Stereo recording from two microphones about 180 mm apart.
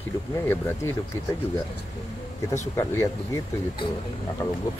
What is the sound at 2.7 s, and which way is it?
Speech, 15° left (ahead or behind).